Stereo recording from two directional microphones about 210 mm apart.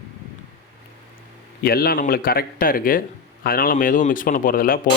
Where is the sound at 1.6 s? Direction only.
45° left (ahead or behind).